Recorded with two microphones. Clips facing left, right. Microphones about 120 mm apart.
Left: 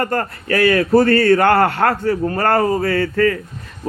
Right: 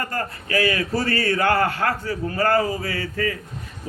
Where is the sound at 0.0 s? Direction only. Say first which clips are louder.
Left 7 dB; 55° left (ahead or behind).